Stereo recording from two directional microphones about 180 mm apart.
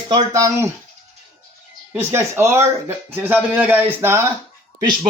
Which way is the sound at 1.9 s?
15° right (ahead or behind).